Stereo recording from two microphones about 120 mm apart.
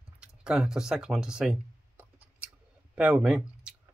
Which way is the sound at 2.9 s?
5° right (ahead or behind).